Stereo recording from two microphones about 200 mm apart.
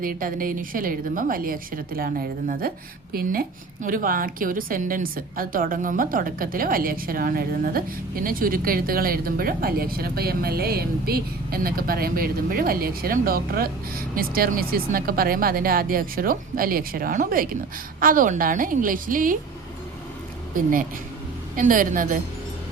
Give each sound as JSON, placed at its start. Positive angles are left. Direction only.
{"t": 0.0, "sound": "a woman's voice", "side_deg": -45}
{"t": 21.5, "sound": "a woman's voice", "side_deg": -40}